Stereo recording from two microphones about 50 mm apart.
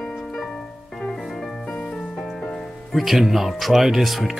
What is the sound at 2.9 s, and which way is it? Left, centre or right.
Speech, centre.